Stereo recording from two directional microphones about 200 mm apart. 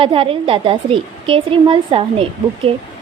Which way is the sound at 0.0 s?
25° right (ahead or behind).